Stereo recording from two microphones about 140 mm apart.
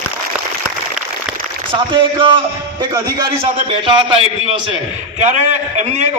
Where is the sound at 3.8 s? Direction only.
40° right (ahead or behind).